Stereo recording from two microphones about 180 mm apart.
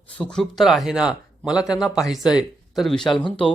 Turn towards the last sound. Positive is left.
turn(degrees=30)  # may be behind; listen again after turning